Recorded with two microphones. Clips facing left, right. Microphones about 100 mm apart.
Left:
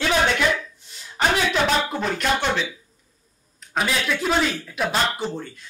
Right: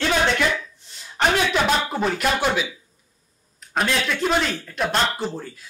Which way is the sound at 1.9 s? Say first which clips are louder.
Right 1 dB; 5° right (ahead or behind).